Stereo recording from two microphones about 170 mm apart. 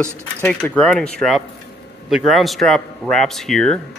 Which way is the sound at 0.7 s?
5° left (ahead or behind).